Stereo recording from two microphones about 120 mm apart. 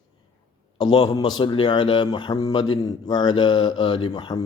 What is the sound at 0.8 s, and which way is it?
Speech, 45° left (ahead or behind).